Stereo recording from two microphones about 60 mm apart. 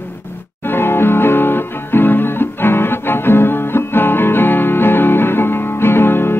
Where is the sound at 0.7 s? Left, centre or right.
Left.